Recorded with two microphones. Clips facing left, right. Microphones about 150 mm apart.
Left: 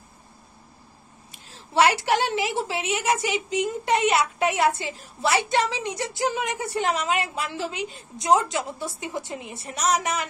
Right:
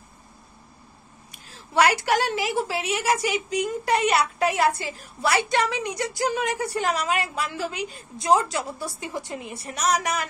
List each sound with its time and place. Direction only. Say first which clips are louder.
1.3 s a woman's voice: even; 25° left (ahead or behind)